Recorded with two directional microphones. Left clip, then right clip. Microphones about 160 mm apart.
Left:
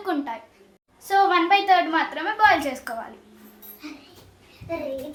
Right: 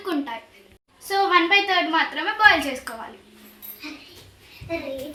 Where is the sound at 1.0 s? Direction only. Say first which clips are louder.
Even; 20° left (ahead or behind).